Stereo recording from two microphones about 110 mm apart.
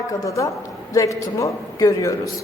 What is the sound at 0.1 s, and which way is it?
A woman's voice, 30° left (ahead or behind).